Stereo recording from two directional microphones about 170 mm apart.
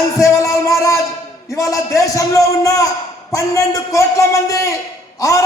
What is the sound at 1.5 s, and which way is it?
A man's voice, 20° left (ahead or behind).